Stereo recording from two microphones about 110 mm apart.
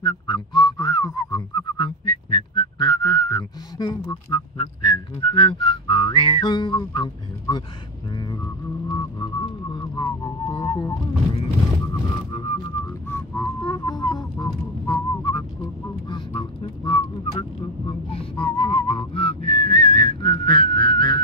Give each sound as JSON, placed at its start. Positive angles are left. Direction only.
{"t": 0.0, "sound": "whistling", "side_deg": 40}
{"t": 4.3, "sound": "whistling", "side_deg": 50}
{"t": 8.8, "sound": "music", "side_deg": 40}
{"t": 12.1, "sound": "music", "side_deg": 45}
{"t": 13.7, "sound": "whistling", "side_deg": 40}
{"t": 16.1, "sound": "quack", "side_deg": 50}
{"t": 17.4, "sound": "whistling", "side_deg": 55}